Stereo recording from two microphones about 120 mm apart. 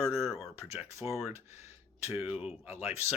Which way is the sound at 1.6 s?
20° right (ahead or behind).